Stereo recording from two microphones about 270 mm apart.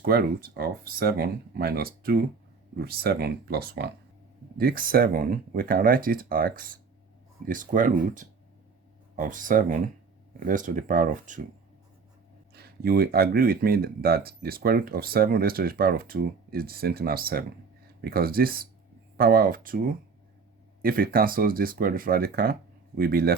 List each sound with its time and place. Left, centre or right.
0.0 s speech: right
12.5 s speech: right